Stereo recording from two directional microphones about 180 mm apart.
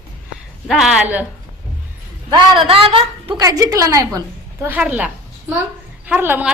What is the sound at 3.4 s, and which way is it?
A woman's voice, 20° right (ahead or behind).